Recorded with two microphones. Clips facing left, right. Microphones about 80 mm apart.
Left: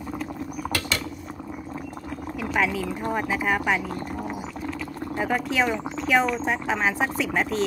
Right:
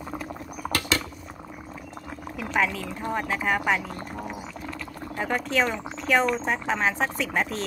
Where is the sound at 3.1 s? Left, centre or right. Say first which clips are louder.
Even; centre.